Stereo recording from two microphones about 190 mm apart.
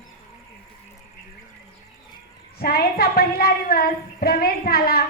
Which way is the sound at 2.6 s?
55° left (ahead or behind).